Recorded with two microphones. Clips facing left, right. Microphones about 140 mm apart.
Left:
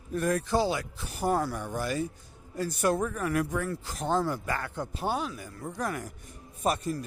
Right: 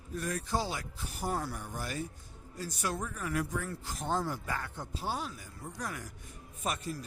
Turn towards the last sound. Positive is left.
turn(degrees=35)  # may be behind; listen again after turning